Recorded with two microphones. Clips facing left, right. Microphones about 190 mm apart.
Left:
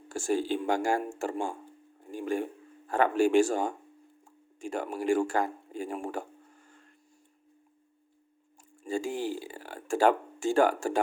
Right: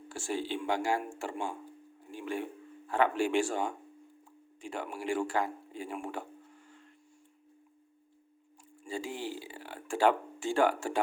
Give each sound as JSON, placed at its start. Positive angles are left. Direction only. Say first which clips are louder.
{"t": 0.1, "sound": "speech", "louder": "left 6 dB", "side_deg": 45}
{"t": 8.8, "sound": "speech", "louder": "left 6 dB", "side_deg": 45}